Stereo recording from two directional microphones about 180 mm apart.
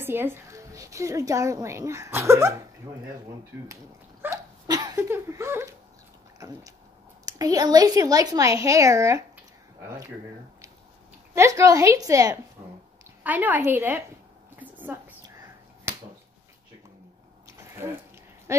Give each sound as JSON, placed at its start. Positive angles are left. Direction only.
{"t": 0.0, "sound": "a woman's voice", "side_deg": -10}
{"t": 3.6, "sound": "a woman's voice", "side_deg": -15}
{"t": 11.3, "sound": "a woman's voice", "side_deg": -15}
{"t": 13.2, "sound": "a woman's voice", "side_deg": -10}
{"t": 14.6, "sound": "a sound", "side_deg": -10}
{"t": 15.9, "sound": "finger snapping", "side_deg": -10}
{"t": 17.5, "sound": "a sound", "side_deg": -15}